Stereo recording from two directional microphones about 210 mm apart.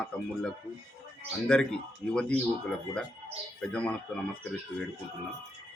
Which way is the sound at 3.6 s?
5° left (ahead or behind).